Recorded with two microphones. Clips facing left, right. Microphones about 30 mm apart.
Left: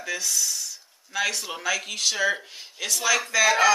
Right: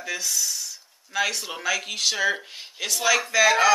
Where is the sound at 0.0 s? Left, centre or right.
Centre.